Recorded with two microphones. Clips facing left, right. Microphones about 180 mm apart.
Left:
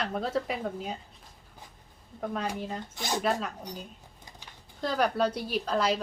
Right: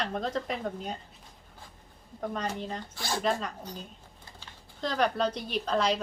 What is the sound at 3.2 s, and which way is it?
Speech, 5° left (ahead or behind).